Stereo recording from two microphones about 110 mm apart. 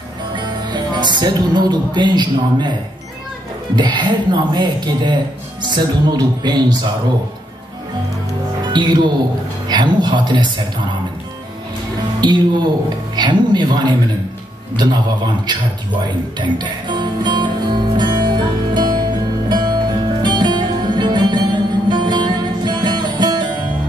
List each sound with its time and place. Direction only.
0.4 s music: 45° right (ahead or behind)
3.7 s speech: 45° right (ahead or behind)
8.7 s speech: 45° right (ahead or behind)
12.2 s speech: 45° right (ahead or behind)
16.3 s music: 45° right (ahead or behind)